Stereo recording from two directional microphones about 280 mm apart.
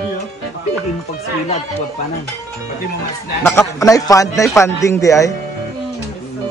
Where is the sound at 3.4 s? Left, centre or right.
Centre.